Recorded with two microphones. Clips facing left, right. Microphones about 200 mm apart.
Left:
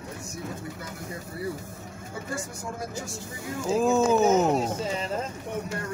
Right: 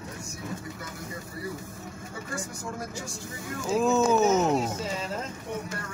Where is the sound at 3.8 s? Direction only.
15° left (ahead or behind).